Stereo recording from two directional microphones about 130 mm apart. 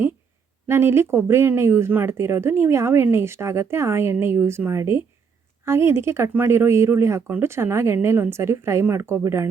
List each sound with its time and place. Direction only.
0.7 s speech: 20° right (ahead or behind)